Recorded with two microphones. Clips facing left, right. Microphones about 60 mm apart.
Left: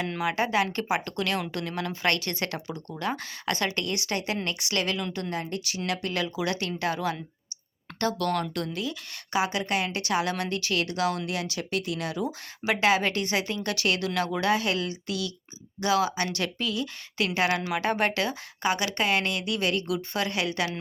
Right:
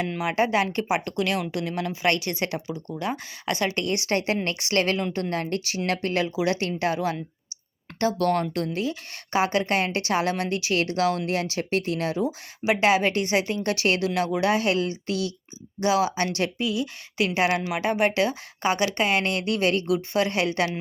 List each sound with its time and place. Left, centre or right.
0.3 s speech: right
3.8 s a woman's voice: right
5.3 s speech: right
5.7 s a woman's voice: right
6.3 s a woman's voice: right
15.8 s speech: right
16.6 s a woman's voice: centre